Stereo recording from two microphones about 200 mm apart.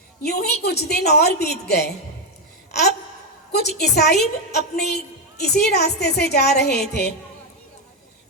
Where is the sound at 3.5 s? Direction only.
55° left (ahead or behind).